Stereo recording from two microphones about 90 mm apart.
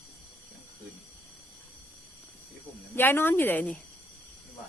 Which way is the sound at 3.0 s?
25° left (ahead or behind).